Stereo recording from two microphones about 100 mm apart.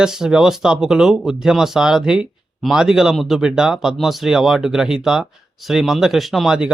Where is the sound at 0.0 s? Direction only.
5° right (ahead or behind).